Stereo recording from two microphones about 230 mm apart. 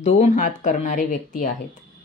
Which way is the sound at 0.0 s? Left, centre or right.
Left.